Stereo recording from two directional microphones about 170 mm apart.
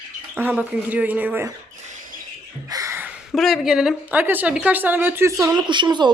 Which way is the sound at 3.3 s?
Centre (ahead or behind).